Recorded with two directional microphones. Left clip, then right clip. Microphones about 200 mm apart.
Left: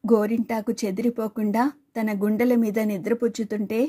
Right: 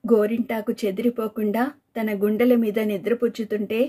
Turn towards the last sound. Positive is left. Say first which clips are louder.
# right 2 dB
turn(degrees=40)  # may be behind; listen again after turning